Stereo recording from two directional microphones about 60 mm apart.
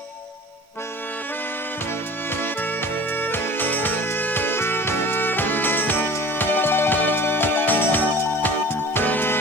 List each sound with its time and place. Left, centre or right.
2.3 s music: left